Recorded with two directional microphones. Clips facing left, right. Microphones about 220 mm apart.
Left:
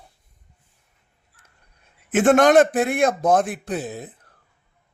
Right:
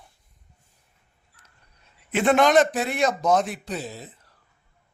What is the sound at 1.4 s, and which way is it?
A man's voice, 50° left (ahead or behind).